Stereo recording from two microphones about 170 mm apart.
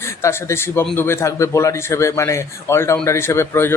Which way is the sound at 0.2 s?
15° left (ahead or behind).